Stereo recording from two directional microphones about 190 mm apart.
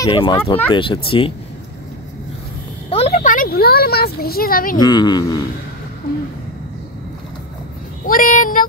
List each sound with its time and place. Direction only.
0.0 s speech: 25° left (ahead or behind)
2.9 s speech: 30° left (ahead or behind); by 4.7 s 50° left (ahead or behind)
4.7 s speech: 20° left (ahead or behind)
8.1 s speech: 45° left (ahead or behind)